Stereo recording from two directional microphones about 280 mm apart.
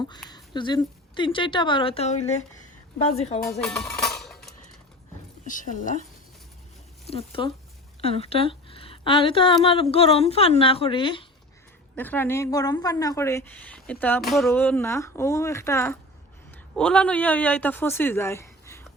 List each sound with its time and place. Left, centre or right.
0.3 s a woman's voice: centre
3.6 s music: centre
5.5 s a woman's voice: left
7.1 s a woman's voice: centre
11.9 s a woman's voice: centre